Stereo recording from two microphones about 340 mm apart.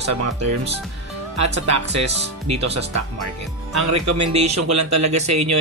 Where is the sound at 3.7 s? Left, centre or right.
Right.